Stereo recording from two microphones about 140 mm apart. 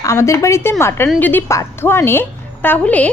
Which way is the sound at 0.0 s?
20° left (ahead or behind).